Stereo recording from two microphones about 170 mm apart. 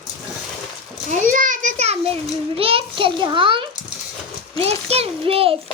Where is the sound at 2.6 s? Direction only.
35° right (ahead or behind).